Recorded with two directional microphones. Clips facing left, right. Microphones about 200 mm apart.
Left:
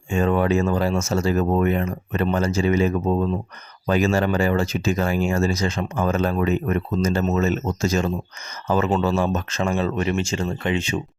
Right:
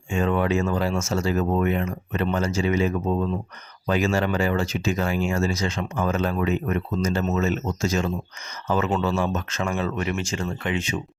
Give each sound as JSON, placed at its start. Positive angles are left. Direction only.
{"t": 0.1, "sound": "speech", "side_deg": 40}